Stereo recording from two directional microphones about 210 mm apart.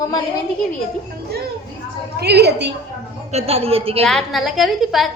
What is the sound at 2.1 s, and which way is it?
Speech, 50° right (ahead or behind).